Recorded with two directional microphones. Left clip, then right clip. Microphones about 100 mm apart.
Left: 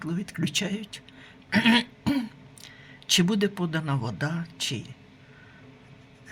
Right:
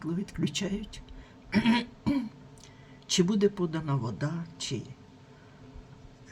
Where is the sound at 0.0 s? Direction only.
20° left (ahead or behind).